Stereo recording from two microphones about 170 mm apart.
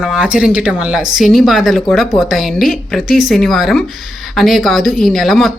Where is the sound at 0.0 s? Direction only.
5° right (ahead or behind).